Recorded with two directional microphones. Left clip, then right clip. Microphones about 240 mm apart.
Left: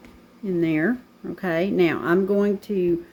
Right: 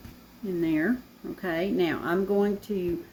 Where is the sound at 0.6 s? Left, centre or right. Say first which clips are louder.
Left 3 dB; left.